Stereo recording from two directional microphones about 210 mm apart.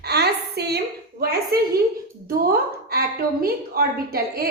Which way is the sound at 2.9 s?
45° right (ahead or behind).